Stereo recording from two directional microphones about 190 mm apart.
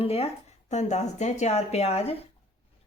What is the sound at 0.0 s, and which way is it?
Speech, 30° left (ahead or behind).